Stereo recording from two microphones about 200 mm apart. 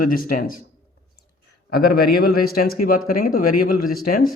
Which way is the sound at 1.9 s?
50° left (ahead or behind).